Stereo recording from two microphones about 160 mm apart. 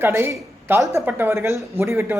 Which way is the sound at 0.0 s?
15° right (ahead or behind).